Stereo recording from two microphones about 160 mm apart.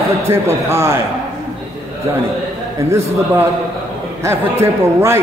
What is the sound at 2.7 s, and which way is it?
Speech, 15° right (ahead or behind).